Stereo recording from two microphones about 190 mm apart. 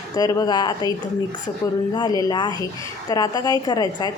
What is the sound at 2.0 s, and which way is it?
A woman's voice, 20° left (ahead or behind).